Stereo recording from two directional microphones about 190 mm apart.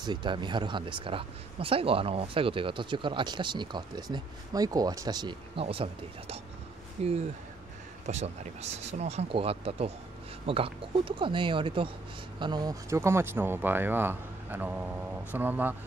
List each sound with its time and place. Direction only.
0.0 s speech: 25° right (ahead or behind)